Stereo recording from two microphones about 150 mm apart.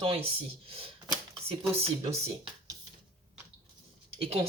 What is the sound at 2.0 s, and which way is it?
Speech, 45° right (ahead or behind).